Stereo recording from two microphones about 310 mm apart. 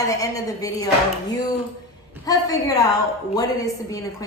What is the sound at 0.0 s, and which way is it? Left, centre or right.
Speech, centre.